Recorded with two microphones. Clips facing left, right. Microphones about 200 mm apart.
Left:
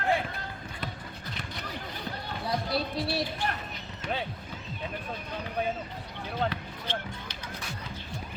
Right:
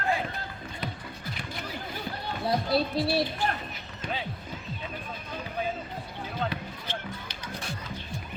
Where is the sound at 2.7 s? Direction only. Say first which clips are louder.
Right 5 dB; 25° right (ahead or behind).